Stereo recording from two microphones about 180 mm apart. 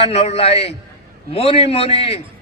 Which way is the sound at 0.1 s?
35° left (ahead or behind).